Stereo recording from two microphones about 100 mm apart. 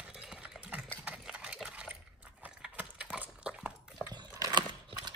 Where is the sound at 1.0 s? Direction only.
10° right (ahead or behind).